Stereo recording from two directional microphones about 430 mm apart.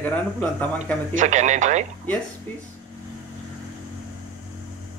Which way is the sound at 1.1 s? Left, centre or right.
Centre.